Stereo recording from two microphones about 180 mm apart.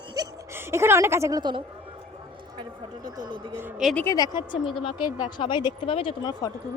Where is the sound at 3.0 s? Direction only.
25° right (ahead or behind).